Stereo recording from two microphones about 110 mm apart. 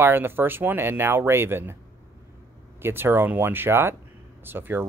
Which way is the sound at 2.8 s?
20° right (ahead or behind).